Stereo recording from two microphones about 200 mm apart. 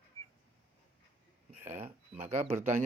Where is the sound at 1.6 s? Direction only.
10° right (ahead or behind).